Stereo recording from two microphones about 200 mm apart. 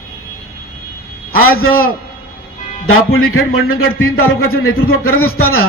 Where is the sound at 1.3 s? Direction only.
90° left.